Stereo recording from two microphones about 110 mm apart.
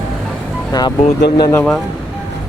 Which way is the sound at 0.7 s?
40° left (ahead or behind).